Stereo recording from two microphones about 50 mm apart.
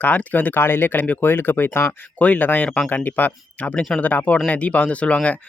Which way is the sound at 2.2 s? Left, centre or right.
Left.